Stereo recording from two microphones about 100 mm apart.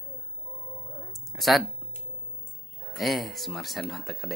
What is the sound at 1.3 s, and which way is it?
Speech, centre (ahead or behind).